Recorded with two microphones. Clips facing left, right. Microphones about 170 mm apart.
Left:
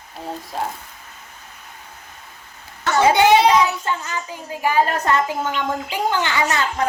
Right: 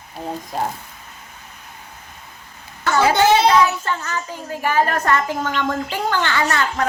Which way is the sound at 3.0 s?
15° left (ahead or behind).